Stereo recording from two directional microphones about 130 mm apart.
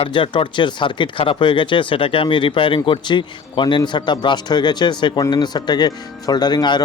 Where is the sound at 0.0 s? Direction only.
40° left (ahead or behind).